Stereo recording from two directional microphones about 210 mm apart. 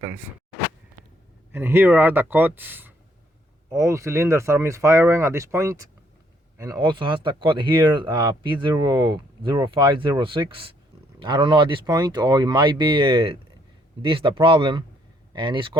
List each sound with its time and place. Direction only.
0.0 s speech: 10° right (ahead or behind)
1.5 s speech: 10° right (ahead or behind)